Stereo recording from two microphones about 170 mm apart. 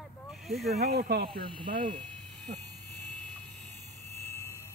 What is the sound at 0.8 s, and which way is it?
Speech, 65° right (ahead or behind).